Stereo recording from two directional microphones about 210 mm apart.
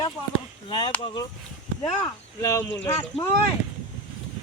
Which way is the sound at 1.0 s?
25° left (ahead or behind).